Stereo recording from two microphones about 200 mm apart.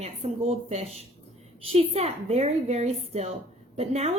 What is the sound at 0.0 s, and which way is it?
A woman's voice, 30° right (ahead or behind).